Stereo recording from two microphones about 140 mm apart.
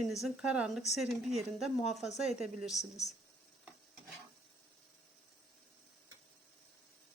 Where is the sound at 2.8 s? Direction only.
55° left (ahead or behind).